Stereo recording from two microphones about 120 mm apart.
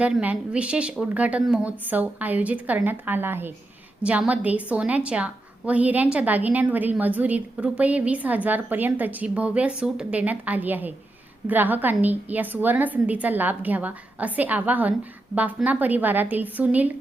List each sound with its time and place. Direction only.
0.0 s a woman's voice: 10° right (ahead or behind)